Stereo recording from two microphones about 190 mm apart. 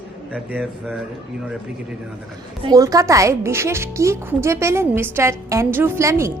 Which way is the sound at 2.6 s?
20° right (ahead or behind).